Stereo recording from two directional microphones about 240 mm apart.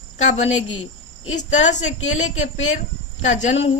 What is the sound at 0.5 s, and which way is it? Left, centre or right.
Speech, left.